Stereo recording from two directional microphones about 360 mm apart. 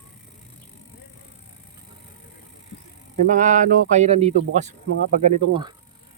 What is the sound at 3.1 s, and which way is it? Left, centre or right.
Speech, right.